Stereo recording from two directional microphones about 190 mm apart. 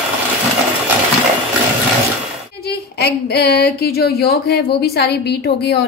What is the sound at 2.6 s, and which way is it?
A woman's voice, 55° left (ahead or behind).